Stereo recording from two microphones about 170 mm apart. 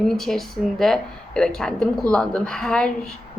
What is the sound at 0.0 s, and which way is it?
Speech, centre (ahead or behind).